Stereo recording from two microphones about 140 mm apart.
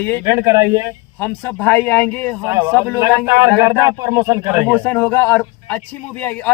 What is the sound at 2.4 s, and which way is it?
Speech, 15° right (ahead or behind).